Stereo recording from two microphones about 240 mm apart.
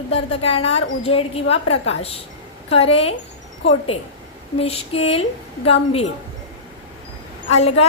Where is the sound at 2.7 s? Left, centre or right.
Left.